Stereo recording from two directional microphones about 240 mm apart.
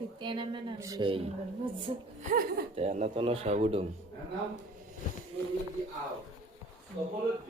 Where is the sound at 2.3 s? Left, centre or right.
Right.